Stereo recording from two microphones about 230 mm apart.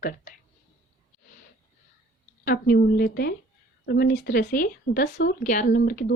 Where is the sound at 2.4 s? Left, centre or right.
Left.